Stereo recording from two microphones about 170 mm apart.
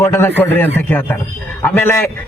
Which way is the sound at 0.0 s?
15° left (ahead or behind).